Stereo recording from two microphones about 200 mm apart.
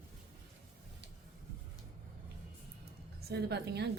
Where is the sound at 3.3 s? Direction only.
55° right (ahead or behind).